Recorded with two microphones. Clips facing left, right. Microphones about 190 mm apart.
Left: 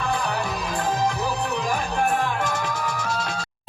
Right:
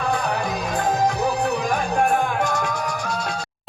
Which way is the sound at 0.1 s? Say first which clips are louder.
Right 2 dB; 45° right (ahead or behind).